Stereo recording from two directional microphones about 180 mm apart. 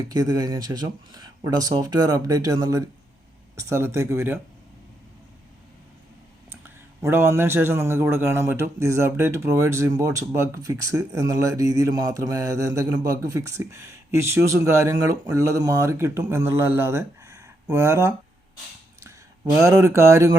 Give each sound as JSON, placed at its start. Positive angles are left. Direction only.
{"t": 0.1, "sound": "speech", "side_deg": -20}
{"t": 7.0, "sound": "speech", "side_deg": -15}
{"t": 19.6, "sound": "speech", "side_deg": -15}